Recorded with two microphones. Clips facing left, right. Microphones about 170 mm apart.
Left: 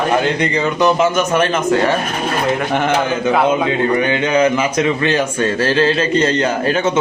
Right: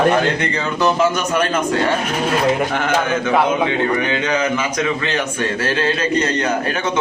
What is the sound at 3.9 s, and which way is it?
A man's voice, 25° left (ahead or behind).